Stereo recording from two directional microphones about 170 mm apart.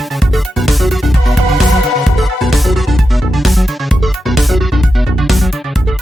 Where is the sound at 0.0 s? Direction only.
Centre (ahead or behind).